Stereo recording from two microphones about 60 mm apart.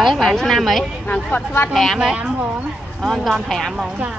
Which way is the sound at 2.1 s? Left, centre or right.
Right.